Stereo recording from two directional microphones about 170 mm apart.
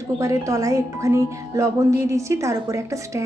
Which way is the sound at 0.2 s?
20° right (ahead or behind).